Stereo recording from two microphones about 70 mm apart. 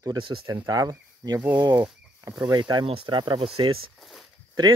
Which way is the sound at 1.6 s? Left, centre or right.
Right.